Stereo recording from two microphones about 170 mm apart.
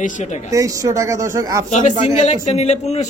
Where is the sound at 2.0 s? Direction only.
40° left (ahead or behind).